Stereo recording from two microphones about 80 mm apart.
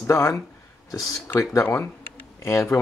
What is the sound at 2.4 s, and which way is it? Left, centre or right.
Speech, left.